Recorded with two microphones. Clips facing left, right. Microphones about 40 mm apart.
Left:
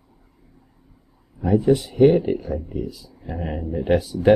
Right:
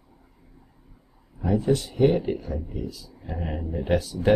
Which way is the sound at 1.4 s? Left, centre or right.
Centre.